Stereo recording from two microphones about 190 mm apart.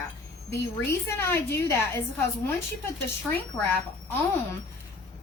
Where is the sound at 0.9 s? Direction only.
15° left (ahead or behind).